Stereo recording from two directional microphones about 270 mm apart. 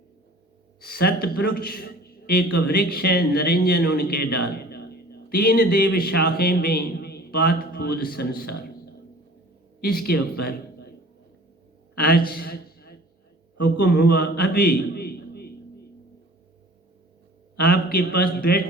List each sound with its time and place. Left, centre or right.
0.8 s a man's voice: left
9.8 s a man's voice: left
11.9 s a man's voice: left
12.3 s a sound: left
13.7 s a man's voice: left
17.6 s a man's voice: left